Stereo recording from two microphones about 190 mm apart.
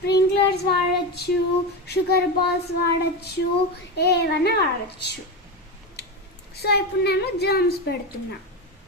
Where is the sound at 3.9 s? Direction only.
60° left (ahead or behind).